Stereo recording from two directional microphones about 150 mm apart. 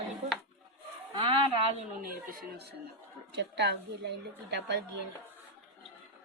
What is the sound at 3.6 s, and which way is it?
Speech, 90° right.